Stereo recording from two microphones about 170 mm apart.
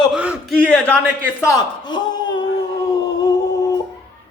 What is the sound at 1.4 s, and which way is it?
Speech, 20° left (ahead or behind).